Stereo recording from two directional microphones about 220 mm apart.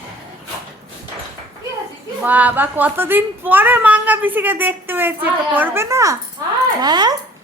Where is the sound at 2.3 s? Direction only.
5° right (ahead or behind).